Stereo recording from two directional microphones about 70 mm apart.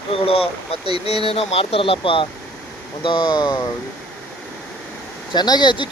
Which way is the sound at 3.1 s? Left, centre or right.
Left.